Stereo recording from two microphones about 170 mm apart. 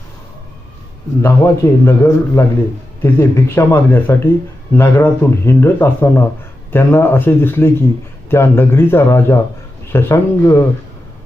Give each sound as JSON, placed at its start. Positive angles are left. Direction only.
{"t": 1.2, "sound": "speech", "side_deg": 15}